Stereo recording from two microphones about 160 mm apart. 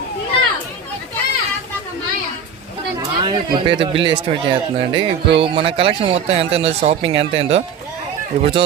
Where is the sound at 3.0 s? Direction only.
25° right (ahead or behind).